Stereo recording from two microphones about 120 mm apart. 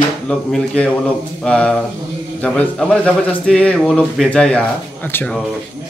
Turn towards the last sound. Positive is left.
turn(degrees=15)  # may be behind; listen again after turning